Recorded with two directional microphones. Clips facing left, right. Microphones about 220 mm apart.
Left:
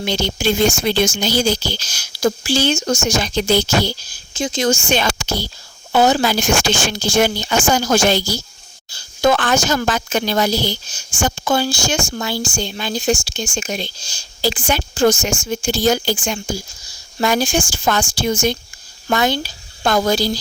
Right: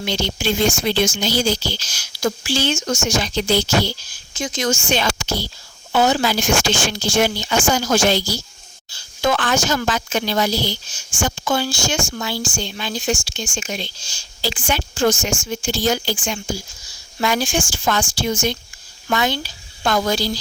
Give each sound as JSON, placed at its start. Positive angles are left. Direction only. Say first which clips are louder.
{"t": 0.0, "sound": "speech", "louder": "left 3 dB", "side_deg": 40}
{"t": 4.4, "sound": "speech", "louder": "left 4 dB", "side_deg": 30}
{"t": 4.9, "sound": "a woman's voice", "louder": "left 2 dB", "side_deg": 45}